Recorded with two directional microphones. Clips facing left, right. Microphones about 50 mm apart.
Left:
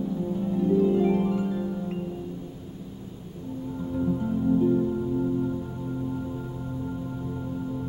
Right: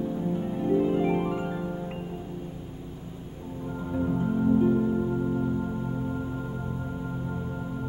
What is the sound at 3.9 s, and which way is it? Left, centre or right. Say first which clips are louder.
Music: even; right.